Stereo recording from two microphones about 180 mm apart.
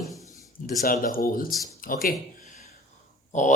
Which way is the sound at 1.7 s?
50° left (ahead or behind).